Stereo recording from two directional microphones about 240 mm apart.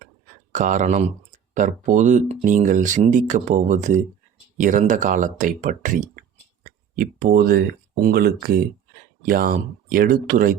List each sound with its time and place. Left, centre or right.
0.5 s speech: right